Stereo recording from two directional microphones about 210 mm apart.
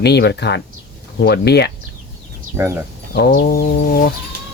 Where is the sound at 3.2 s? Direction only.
50° left (ahead or behind).